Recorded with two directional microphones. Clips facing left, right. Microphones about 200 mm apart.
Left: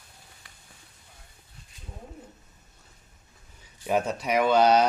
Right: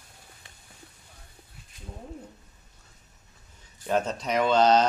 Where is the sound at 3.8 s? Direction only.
10° left (ahead or behind).